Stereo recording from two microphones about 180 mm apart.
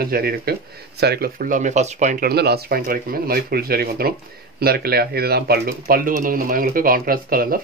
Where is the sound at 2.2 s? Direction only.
60° right (ahead or behind).